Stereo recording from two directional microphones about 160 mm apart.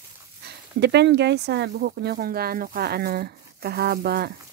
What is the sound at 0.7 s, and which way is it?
Speech, 90° right.